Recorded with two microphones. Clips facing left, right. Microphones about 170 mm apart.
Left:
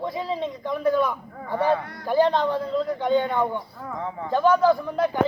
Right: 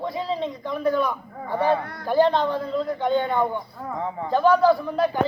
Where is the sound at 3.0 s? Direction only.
15° left (ahead or behind).